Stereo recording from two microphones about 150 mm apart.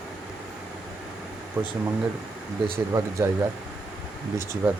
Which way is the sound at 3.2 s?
15° right (ahead or behind).